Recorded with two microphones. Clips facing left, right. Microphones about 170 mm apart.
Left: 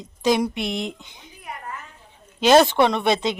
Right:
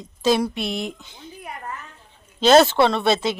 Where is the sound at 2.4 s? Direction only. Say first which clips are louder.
Right 1 dB; 15° left (ahead or behind).